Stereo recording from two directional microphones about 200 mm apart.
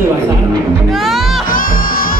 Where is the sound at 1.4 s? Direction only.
45° left (ahead or behind).